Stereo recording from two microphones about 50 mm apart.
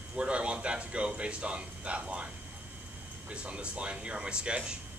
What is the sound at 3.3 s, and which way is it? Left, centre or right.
Speech, right.